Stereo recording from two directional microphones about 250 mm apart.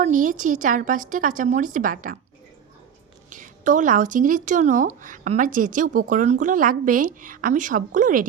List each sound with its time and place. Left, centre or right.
0.0 s speech: right
3.2 s speech: right